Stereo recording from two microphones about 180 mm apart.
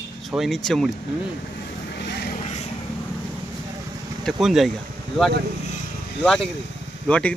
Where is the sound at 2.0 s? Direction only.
70° left (ahead or behind).